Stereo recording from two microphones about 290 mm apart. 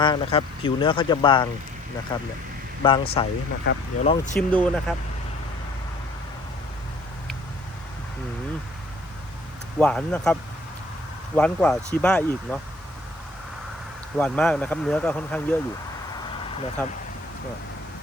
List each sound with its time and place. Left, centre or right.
0.0 s speech: centre
3.7 s speech: left
4.0 s speech: left
4.4 s speech: centre
9.7 s speech: centre
11.3 s speech: centre
14.2 s speech: centre
16.8 s speech: centre